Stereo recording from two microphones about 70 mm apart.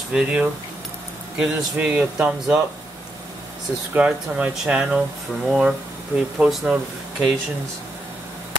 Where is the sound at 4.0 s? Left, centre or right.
Centre.